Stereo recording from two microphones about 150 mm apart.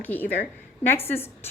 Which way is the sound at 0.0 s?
10° left (ahead or behind).